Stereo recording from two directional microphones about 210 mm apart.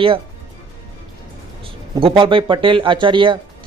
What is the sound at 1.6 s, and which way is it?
Speech, 25° right (ahead or behind).